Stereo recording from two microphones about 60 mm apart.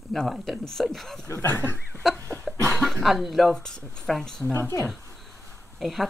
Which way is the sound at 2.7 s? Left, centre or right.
Centre.